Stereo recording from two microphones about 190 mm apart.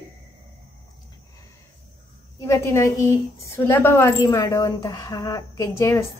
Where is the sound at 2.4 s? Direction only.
15° left (ahead or behind).